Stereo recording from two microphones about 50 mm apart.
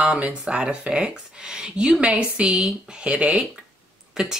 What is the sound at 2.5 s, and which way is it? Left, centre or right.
Speech, centre.